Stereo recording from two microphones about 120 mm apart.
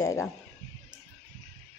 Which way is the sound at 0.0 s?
25° left (ahead or behind).